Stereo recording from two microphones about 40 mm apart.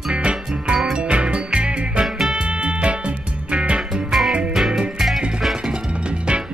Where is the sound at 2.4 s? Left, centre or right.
Right.